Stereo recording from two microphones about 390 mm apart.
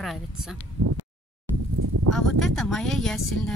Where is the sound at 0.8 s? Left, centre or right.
Right.